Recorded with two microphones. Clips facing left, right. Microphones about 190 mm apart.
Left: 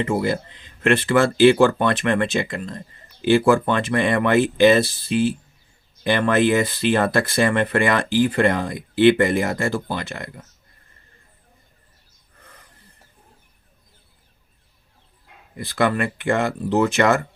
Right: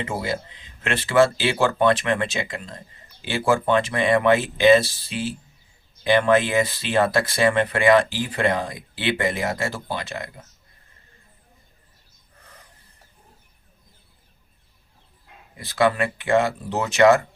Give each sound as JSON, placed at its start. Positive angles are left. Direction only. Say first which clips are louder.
{"t": 0.0, "sound": "speech", "louder": "left 6 dB", "side_deg": 55}
{"t": 6.3, "sound": "speech", "louder": "left 2 dB", "side_deg": 55}
{"t": 15.5, "sound": "speech", "louder": "even", "side_deg": 55}